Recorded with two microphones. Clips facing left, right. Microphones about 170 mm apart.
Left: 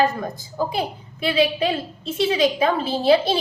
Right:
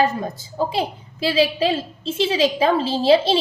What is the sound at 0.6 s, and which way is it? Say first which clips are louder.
A woman's voice: right 2 dB; 30° right (ahead or behind).